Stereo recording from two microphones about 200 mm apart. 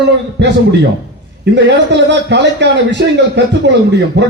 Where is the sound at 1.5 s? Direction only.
60° right (ahead or behind).